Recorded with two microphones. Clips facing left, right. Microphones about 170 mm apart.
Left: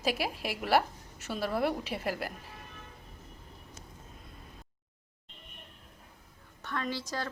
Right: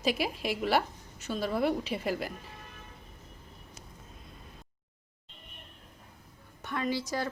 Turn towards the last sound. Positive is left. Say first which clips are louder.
# right 4 dB
turn(degrees=-10)  # may be behind; listen again after turning